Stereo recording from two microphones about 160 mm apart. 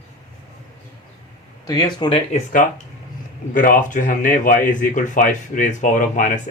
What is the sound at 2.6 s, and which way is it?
Speech, 50° left (ahead or behind).